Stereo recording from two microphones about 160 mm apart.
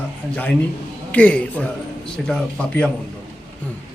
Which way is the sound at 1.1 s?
10° left (ahead or behind).